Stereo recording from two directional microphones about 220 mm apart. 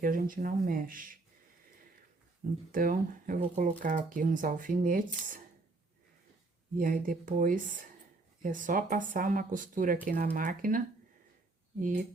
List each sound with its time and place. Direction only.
0.0 s speech: 40° right (ahead or behind)
2.7 s speech: 40° right (ahead or behind)
6.7 s speech: 40° right (ahead or behind)